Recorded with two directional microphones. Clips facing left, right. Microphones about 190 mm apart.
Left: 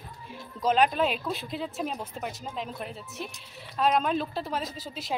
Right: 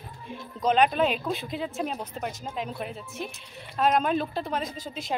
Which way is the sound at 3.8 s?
Centre (ahead or behind).